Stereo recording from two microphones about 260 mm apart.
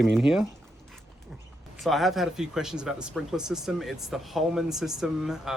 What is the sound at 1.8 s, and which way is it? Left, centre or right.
Speech, centre.